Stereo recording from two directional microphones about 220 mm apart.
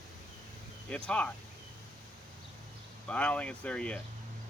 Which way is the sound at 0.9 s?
5° left (ahead or behind).